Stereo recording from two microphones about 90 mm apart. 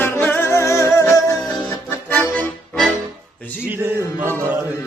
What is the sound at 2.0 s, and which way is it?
Accordion, 20° left (ahead or behind).